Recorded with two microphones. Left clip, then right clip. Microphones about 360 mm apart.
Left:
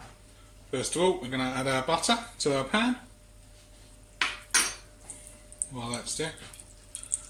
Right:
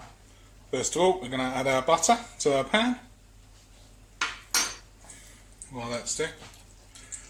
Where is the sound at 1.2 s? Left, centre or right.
Centre.